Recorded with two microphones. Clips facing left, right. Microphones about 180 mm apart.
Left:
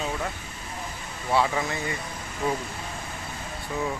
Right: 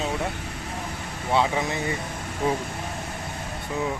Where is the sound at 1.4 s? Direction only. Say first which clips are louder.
Right 1 dB; 20° right (ahead or behind).